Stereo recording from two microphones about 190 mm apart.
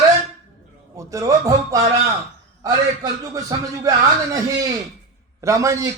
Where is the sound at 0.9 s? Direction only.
15° right (ahead or behind).